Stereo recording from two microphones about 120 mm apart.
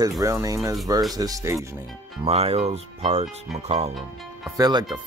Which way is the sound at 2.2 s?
55° right (ahead or behind).